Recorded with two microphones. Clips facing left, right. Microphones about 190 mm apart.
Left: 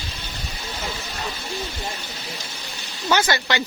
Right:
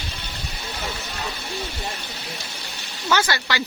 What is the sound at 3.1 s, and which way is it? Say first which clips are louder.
Speech: left 2 dB; 20° left (ahead or behind).